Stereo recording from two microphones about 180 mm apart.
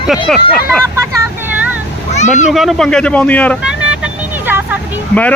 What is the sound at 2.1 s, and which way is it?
Speech, 40° left (ahead or behind).